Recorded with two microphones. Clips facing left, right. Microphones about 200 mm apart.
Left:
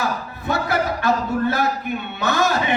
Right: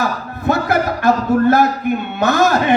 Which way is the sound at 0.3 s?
50° right (ahead or behind).